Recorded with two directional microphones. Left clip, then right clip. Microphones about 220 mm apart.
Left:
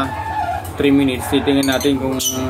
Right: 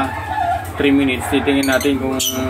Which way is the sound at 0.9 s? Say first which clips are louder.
Even; 45° left (ahead or behind).